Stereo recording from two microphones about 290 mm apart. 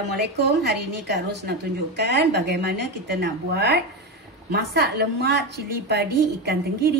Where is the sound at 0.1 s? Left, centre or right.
Right.